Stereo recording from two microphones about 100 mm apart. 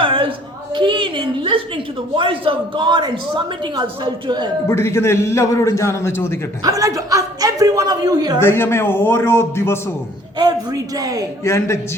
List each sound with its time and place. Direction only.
0.0 s a sound: 60° right (ahead or behind)
4.7 s a man's voice: 25° left (ahead or behind)
6.6 s a man's voice: 35° right (ahead or behind)
8.4 s a man's voice: 25° left (ahead or behind)
10.3 s a man's voice: 40° right (ahead or behind)
11.4 s a man's voice: 30° left (ahead or behind)